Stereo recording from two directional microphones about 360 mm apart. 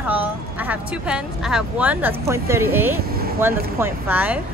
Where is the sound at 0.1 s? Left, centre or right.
Centre.